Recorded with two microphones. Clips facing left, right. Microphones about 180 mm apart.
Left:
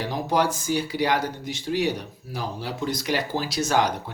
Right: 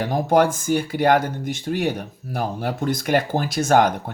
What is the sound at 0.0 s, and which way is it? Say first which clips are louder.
Speech: right 6 dB; 50° right (ahead or behind).